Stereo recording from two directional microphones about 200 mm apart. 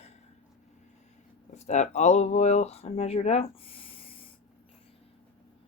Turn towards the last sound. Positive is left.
turn(degrees=25)  # may be behind; listen again after turning